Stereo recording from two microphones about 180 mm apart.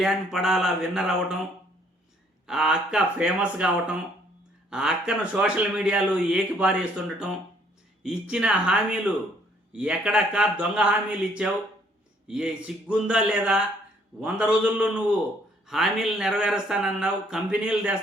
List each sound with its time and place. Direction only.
0.0 s speech: centre (ahead or behind)
2.5 s speech: 5° right (ahead or behind)
8.0 s a man's voice: 5° right (ahead or behind)